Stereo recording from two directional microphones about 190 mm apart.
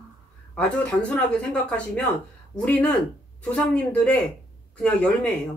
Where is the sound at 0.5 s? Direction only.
5° left (ahead or behind).